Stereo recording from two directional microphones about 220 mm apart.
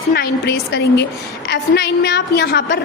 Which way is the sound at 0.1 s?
45° left (ahead or behind).